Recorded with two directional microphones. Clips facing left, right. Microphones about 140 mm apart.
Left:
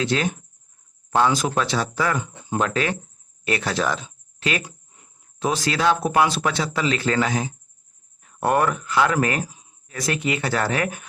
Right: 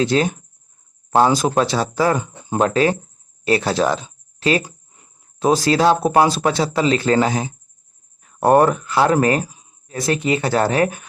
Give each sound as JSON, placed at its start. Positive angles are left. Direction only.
{"t": 0.0, "sound": "speech", "side_deg": -35}